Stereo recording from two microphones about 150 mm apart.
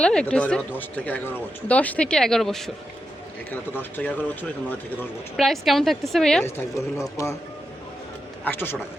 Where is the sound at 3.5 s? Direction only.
10° left (ahead or behind).